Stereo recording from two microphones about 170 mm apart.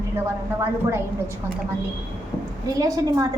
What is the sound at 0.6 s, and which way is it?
Speech, 15° right (ahead or behind).